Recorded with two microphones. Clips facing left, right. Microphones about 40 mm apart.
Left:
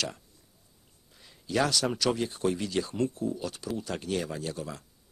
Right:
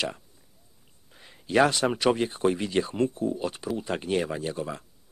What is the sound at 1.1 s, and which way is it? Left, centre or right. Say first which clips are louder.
Speech: right 6 dB; right.